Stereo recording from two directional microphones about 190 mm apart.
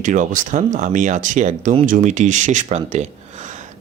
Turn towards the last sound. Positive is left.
turn(degrees=-40)  # may be behind; listen again after turning